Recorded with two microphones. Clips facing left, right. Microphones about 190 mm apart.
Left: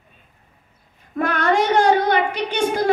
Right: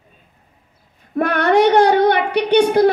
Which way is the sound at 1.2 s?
65° right (ahead or behind).